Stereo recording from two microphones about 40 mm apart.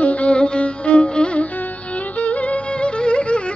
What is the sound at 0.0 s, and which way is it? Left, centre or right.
Music, left.